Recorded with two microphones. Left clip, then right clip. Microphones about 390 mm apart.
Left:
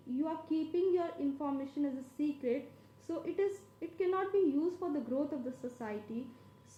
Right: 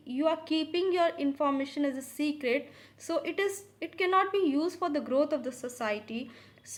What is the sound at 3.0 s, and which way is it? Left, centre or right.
A woman's voice, centre.